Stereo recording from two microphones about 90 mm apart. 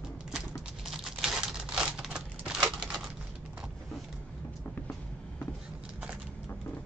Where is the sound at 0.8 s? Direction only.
5° right (ahead or behind).